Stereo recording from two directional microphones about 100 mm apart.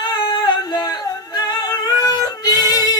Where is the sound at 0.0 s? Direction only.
50° left (ahead or behind).